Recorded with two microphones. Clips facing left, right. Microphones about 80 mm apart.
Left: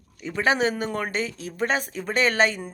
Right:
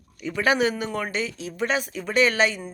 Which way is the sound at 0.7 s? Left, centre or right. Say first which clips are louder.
Left 1 dB; left.